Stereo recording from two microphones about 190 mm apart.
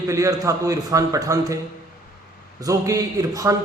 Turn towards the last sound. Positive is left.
turn(degrees=-20)  # may be behind; listen again after turning